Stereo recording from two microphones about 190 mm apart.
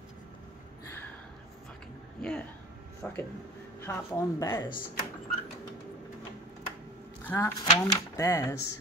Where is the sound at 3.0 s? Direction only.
10° left (ahead or behind).